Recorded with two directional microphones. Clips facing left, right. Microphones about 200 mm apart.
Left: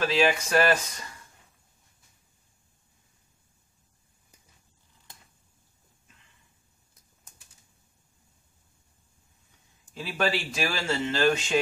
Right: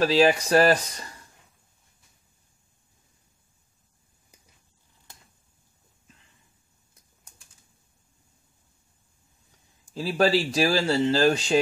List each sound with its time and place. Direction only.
0.0 s speech: 35° right (ahead or behind)
9.9 s speech: 35° right (ahead or behind)